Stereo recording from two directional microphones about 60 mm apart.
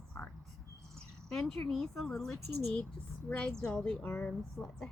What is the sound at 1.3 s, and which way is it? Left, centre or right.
Speech, centre.